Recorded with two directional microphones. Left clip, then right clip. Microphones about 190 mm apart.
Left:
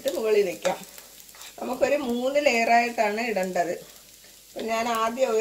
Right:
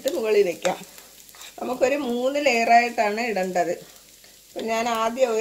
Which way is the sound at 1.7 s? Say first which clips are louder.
Right 1 dB; 45° right (ahead or behind).